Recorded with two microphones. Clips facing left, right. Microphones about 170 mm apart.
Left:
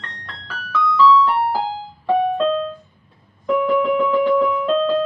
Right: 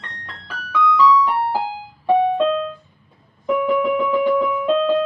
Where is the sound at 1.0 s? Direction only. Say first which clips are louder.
Left 3 dB; 15° right (ahead or behind).